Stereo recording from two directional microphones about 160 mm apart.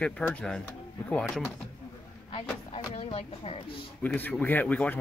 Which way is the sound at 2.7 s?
30° left (ahead or behind).